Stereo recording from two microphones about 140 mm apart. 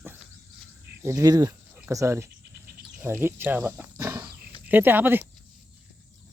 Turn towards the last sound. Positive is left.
turn(degrees=-15)  # may be behind; listen again after turning